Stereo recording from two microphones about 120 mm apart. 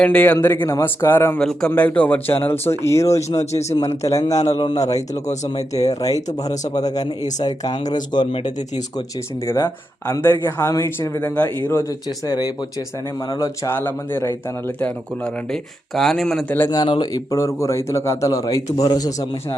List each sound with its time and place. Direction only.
0.0 s speech: 10° left (ahead or behind)
1.4 s speech: 5° left (ahead or behind); by 3.2 s 25° left (ahead or behind)
3.5 s speech: 65° left (ahead or behind)
3.8 s speech: 25° left (ahead or behind)
9.5 s speech: 25° left (ahead or behind)
13.7 s speech: 20° left (ahead or behind)
16.6 s speech: 40° left (ahead or behind)